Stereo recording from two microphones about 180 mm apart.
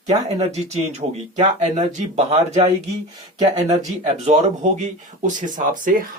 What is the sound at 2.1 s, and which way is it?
Speech, 35° right (ahead or behind).